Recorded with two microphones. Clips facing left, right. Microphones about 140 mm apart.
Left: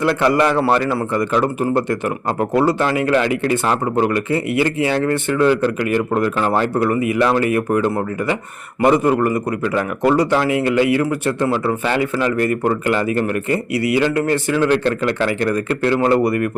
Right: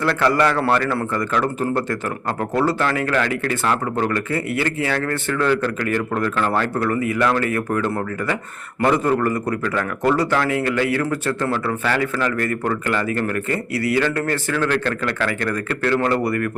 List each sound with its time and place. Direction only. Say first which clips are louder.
0.0 s a man's voice: left 2 dB; 15° left (ahead or behind)